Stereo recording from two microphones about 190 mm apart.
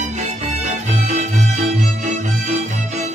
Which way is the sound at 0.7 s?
35° right (ahead or behind).